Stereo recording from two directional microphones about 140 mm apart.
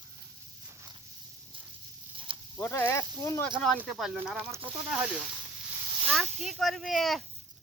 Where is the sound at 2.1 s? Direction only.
40° right (ahead or behind).